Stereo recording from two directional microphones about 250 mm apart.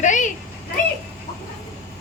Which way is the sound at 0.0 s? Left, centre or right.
Left.